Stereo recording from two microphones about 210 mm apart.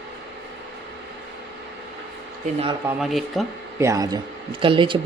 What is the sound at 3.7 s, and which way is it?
Speech, 15° right (ahead or behind).